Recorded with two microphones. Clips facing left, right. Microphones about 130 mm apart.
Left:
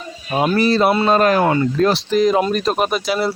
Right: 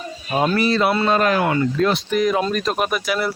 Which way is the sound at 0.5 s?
35° left (ahead or behind).